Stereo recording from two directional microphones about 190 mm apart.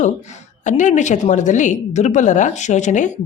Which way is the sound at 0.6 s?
40° left (ahead or behind).